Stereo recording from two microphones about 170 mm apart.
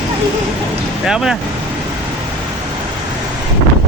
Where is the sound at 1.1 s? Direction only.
5° right (ahead or behind).